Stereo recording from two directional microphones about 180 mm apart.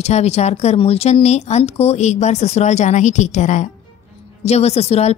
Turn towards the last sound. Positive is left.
turn(degrees=35)  # may be behind; listen again after turning